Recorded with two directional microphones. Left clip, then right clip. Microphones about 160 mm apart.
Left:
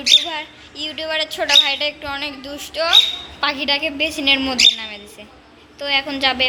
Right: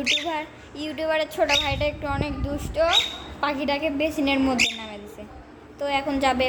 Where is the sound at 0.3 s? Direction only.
20° right (ahead or behind).